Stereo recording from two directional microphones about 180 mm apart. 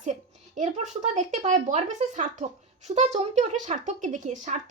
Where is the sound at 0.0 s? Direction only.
40° right (ahead or behind).